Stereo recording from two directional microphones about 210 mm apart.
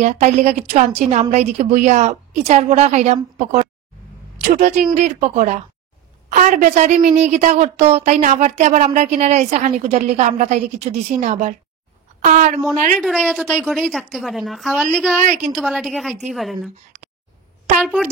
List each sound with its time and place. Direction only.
0.0 s a woman's voice: 35° right (ahead or behind)
4.5 s a woman's voice: 35° right (ahead or behind)
12.9 s a woman's voice: centre (ahead or behind)
17.7 s a woman's voice: centre (ahead or behind)